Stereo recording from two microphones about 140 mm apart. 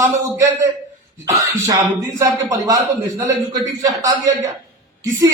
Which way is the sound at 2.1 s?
25° right (ahead or behind).